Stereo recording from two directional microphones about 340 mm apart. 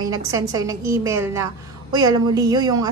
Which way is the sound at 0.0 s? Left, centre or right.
Centre.